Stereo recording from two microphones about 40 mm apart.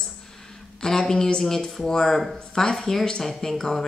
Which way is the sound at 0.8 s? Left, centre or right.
Centre.